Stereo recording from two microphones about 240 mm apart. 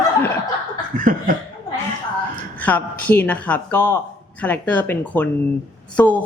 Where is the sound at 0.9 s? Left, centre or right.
Right.